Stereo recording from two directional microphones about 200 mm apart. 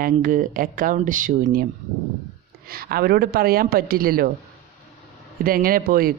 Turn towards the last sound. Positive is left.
turn(degrees=-45)  # may be behind; listen again after turning